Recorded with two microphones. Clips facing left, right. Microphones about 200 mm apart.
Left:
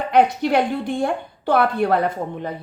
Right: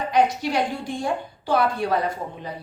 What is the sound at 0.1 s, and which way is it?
A woman's voice, 60° left (ahead or behind).